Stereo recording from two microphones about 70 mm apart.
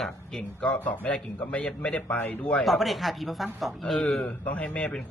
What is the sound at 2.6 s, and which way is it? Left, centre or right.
A man's voice, centre.